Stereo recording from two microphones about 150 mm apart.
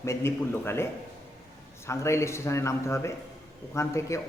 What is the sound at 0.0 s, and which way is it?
Speech, 20° left (ahead or behind).